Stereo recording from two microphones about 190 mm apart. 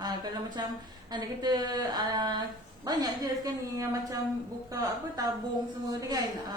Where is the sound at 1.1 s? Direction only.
20° right (ahead or behind).